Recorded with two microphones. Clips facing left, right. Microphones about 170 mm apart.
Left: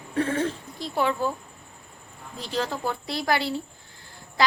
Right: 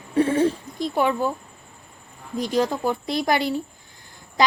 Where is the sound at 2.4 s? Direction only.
15° right (ahead or behind).